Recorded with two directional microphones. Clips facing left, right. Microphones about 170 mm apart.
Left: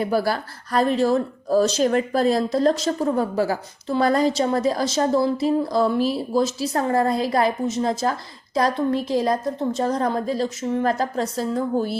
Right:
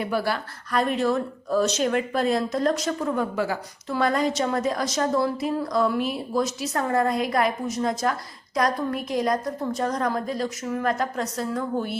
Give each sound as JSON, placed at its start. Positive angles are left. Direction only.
{"t": 0.0, "sound": "a woman's voice", "side_deg": 40}